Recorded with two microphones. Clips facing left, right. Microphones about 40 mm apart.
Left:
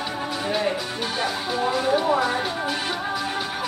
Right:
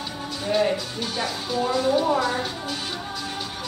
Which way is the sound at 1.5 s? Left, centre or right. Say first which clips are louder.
Right 1 dB; centre.